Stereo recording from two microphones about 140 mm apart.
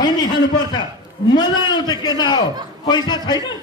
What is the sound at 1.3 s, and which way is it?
A man's voice, 30° left (ahead or behind).